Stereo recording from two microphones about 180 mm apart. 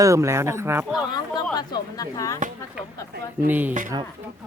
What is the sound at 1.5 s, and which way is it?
Speech, 20° left (ahead or behind).